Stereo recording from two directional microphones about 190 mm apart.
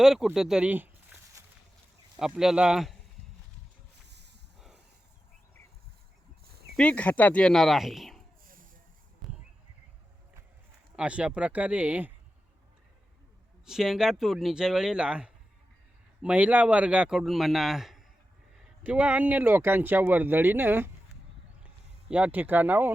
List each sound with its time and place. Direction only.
0.0 s a man's voice: centre (ahead or behind)
4.1 s a sound: 65° right (ahead or behind)
6.7 s a man's voice: 5° left (ahead or behind)
9.2 s a sound: centre (ahead or behind)
10.9 s speech: 5° right (ahead or behind)
13.7 s a man's voice: centre (ahead or behind)
22.1 s speech: 10° right (ahead or behind)